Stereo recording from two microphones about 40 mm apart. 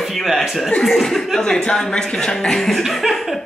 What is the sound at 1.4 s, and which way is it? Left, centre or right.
Speech, centre.